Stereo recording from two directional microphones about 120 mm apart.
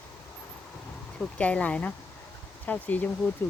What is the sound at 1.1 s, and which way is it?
Speech, 10° left (ahead or behind).